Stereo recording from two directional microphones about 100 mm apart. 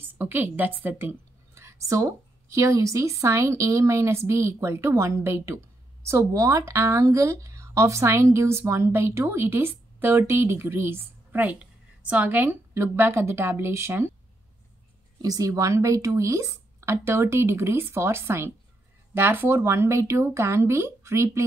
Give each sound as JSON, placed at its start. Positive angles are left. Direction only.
{"t": 0.0, "sound": "speech", "side_deg": -20}
{"t": 15.2, "sound": "speech", "side_deg": -35}